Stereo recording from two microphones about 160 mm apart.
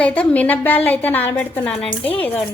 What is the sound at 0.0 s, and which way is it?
Speech, 10° left (ahead or behind).